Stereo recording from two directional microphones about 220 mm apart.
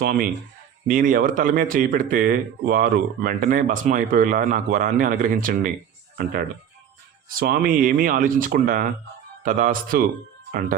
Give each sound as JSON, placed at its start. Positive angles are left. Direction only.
{"t": 0.0, "sound": "speech", "side_deg": -40}
{"t": 7.3, "sound": "speech", "side_deg": -40}